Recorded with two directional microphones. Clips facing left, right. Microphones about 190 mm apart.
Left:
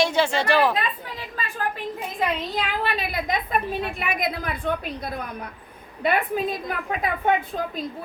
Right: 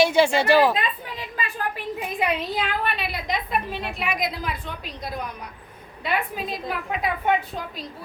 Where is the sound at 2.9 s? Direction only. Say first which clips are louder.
Left 2 dB; 50° left (ahead or behind).